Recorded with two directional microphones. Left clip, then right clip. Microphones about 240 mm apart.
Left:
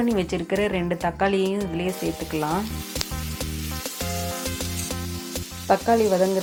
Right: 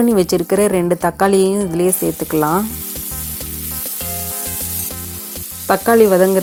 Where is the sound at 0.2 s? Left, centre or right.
Right.